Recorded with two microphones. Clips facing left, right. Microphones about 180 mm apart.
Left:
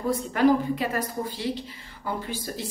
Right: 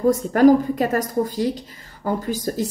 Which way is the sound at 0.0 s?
45° right (ahead or behind).